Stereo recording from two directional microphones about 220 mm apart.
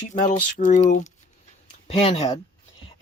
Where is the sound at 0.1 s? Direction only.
35° left (ahead or behind).